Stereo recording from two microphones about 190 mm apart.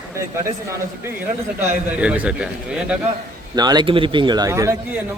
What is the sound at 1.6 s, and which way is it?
A man's voice, 10° right (ahead or behind).